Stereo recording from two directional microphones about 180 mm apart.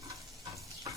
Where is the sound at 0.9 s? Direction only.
20° right (ahead or behind).